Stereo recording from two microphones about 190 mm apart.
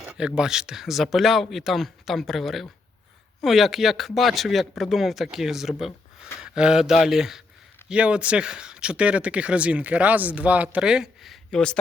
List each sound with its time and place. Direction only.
0.0 s speech: 5° right (ahead or behind)